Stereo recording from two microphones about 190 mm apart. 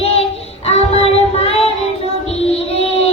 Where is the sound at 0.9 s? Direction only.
30° left (ahead or behind).